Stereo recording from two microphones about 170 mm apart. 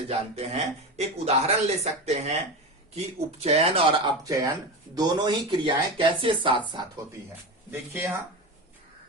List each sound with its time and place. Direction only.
0.3 s speech: 40° right (ahead or behind)
7.7 s speech: 10° right (ahead or behind)